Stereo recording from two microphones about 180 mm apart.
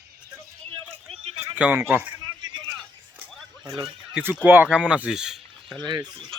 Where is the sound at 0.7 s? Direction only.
35° right (ahead or behind).